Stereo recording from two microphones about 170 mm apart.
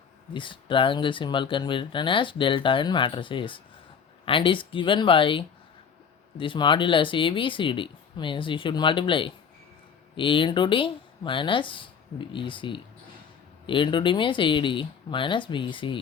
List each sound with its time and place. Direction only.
0.3 s speech: 30° left (ahead or behind)